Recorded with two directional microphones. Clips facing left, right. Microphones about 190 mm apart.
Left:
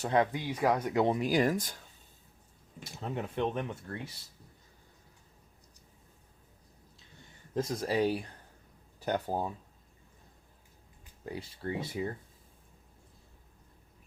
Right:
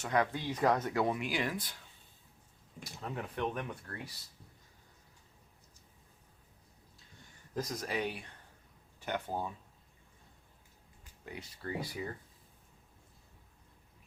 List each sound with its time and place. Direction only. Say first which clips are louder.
0.0 s speech: left 4 dB; 30° left (ahead or behind)
0.3 s speech: left 1 dB; 10° left (ahead or behind)
1.0 s speech: left 7 dB; 35° left (ahead or behind)
2.8 s speech: left 4 dB; 25° left (ahead or behind)
7.5 s speech: left 6 dB; 30° left (ahead or behind)
11.3 s speech: left 4 dB; 30° left (ahead or behind)